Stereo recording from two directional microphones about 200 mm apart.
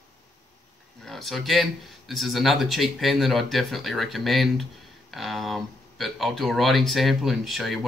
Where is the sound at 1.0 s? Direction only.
Centre (ahead or behind).